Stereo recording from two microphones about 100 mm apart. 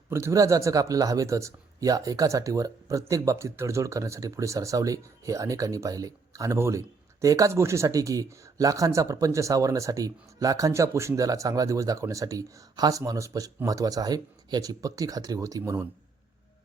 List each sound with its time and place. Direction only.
0.1 s speech: 30° right (ahead or behind)